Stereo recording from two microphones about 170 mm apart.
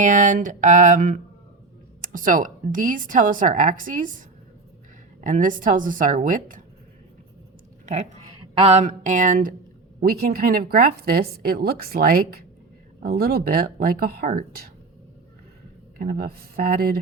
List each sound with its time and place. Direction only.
0.0 s a woman's voice: 50° right (ahead or behind)
5.2 s a woman's voice: 50° right (ahead or behind)
7.9 s a woman's voice: 45° right (ahead or behind)
16.0 s a woman's voice: 60° right (ahead or behind)